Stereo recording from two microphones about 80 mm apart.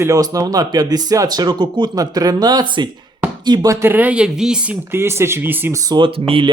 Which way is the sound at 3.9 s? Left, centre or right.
Centre.